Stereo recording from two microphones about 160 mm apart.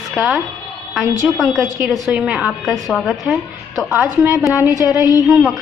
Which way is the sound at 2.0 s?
5° right (ahead or behind).